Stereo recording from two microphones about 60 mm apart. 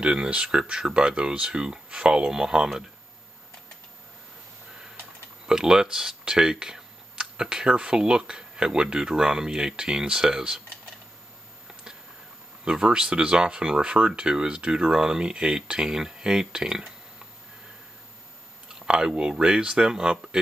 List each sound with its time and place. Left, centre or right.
0.0 s speech: centre
5.5 s speech: centre
12.6 s speech: centre
18.8 s speech: centre